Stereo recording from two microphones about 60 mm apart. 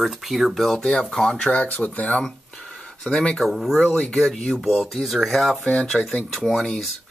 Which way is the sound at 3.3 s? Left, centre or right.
Centre.